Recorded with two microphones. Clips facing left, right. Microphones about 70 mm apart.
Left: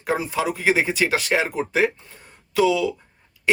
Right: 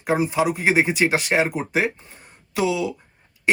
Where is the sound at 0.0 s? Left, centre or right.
Right.